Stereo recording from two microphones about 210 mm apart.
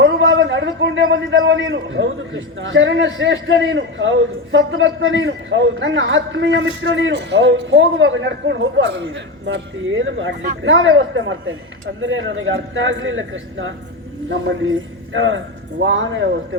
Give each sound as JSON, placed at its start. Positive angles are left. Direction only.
{"t": 0.0, "sound": "a man's voice", "side_deg": -60}